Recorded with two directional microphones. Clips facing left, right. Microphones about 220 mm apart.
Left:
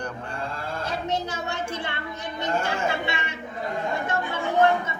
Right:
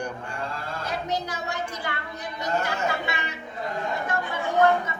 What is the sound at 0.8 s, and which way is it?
A woman's voice, 25° left (ahead or behind).